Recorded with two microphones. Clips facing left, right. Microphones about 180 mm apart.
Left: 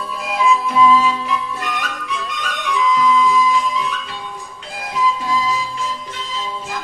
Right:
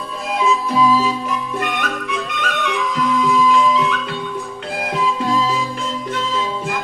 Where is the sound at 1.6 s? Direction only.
55° right (ahead or behind).